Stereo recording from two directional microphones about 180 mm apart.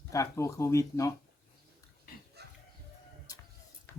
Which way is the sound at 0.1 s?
15° left (ahead or behind).